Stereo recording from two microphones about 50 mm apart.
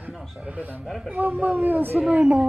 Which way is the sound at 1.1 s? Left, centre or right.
Right.